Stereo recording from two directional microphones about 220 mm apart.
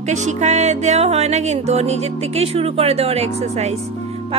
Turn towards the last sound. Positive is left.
turn(degrees=-30)  # may be behind; listen again after turning